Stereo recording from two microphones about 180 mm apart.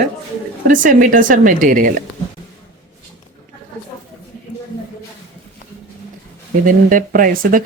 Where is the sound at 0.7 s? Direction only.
50° right (ahead or behind).